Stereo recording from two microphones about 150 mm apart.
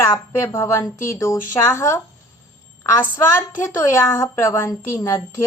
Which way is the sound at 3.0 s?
20° left (ahead or behind).